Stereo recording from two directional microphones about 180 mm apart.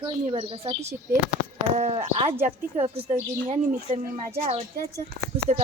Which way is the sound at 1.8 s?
35° right (ahead or behind).